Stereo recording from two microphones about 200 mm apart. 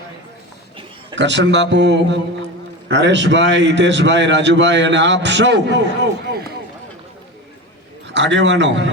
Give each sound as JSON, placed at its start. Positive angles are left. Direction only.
{"t": 1.1, "sound": "a man's voice", "side_deg": -65}
{"t": 8.0, "sound": "a man's voice", "side_deg": -65}